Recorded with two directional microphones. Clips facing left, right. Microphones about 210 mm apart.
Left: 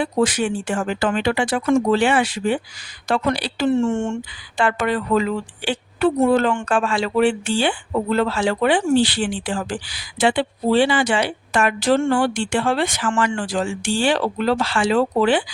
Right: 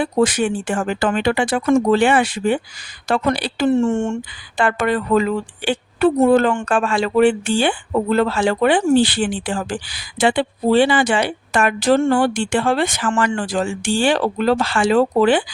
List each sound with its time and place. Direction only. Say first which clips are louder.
0.0 s speech: right 2 dB; 55° right (ahead or behind)